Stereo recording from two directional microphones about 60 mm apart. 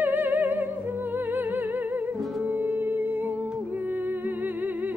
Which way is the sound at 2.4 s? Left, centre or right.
Right.